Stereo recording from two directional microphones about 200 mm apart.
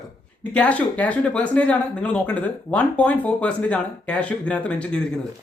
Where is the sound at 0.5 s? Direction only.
5° left (ahead or behind).